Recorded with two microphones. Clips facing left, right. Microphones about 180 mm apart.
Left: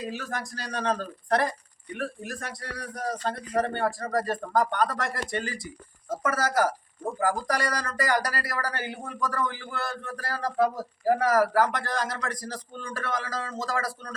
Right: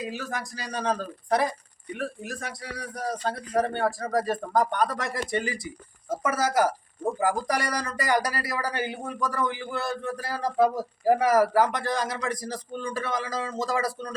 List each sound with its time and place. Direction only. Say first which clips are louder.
0.0 s speech: right 1 dB; 10° right (ahead or behind)